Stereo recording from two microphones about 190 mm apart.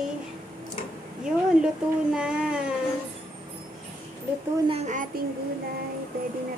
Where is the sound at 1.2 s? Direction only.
5° right (ahead or behind).